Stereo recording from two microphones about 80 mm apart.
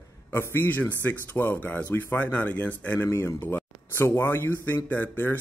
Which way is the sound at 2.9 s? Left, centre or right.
Left.